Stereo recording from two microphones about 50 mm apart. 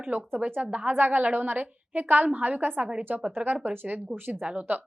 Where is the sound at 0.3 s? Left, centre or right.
Right.